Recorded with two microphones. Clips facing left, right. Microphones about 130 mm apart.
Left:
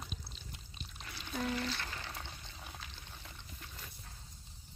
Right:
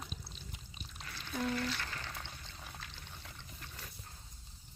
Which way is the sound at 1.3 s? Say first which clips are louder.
Right 1 dB; 5° left (ahead or behind).